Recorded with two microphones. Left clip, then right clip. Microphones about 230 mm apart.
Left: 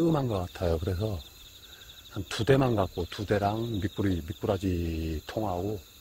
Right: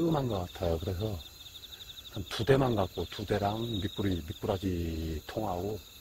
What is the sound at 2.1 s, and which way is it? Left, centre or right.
Speech, left.